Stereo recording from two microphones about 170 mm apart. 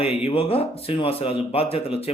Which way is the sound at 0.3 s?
35° left (ahead or behind).